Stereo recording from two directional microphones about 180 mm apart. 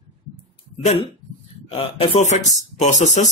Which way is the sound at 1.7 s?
35° left (ahead or behind).